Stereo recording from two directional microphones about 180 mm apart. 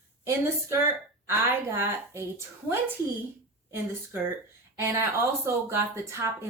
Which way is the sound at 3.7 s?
10° right (ahead or behind).